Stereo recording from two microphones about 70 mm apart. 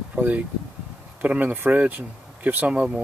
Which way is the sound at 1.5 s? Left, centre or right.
Right.